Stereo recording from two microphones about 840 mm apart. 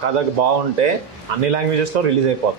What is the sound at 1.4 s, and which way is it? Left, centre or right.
Speech, right.